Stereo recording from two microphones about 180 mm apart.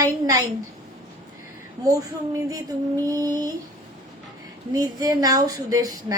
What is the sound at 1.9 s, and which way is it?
Speech, 20° right (ahead or behind).